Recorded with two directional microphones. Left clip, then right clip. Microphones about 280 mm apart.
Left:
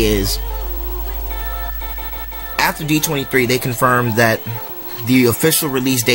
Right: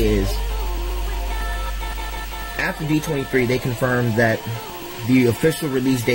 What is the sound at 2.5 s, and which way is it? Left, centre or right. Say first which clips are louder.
Speech: left 6 dB; centre.